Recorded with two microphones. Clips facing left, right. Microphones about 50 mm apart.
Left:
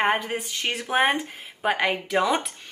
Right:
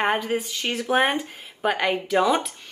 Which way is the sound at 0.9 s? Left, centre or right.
Centre.